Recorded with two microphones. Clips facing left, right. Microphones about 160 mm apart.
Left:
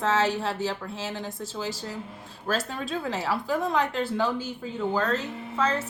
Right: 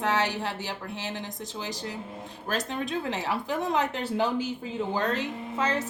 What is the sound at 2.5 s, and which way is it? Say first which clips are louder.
A woman's voice: even; 15° right (ahead or behind).